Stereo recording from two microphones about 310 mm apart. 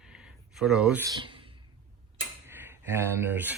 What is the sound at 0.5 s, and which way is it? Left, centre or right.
Speech, centre.